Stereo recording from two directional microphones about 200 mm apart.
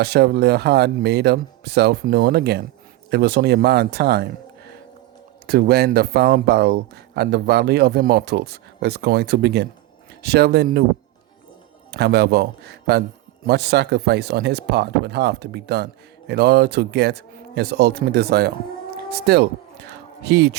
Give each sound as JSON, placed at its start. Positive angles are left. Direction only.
{"t": 0.0, "sound": "speech", "side_deg": -55}
{"t": 5.5, "sound": "speech", "side_deg": -50}
{"t": 11.9, "sound": "speech", "side_deg": -55}